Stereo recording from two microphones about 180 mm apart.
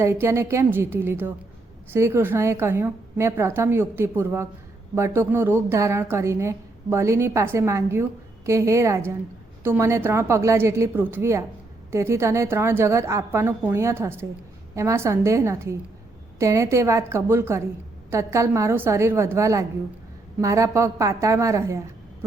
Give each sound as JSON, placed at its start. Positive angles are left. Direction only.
{"t": 0.0, "sound": "a woman's voice", "side_deg": -15}